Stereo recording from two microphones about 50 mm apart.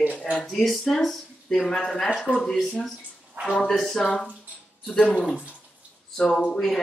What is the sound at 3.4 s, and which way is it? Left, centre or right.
Speech, centre.